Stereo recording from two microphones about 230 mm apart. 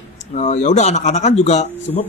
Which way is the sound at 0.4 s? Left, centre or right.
Left.